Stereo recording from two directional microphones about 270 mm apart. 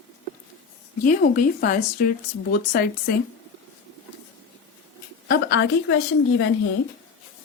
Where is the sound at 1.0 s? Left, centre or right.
Left.